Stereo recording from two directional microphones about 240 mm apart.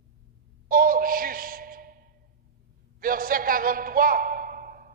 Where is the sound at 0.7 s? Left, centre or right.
Right.